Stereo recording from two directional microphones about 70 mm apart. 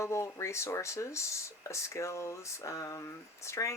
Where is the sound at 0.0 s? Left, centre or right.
Left.